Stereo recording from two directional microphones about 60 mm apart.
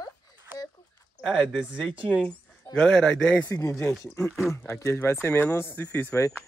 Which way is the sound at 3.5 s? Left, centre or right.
Left.